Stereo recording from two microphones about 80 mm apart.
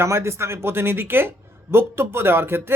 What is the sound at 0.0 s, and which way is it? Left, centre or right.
A man's voice, right.